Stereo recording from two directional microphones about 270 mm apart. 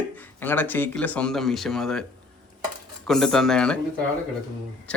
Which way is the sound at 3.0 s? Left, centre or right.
Centre.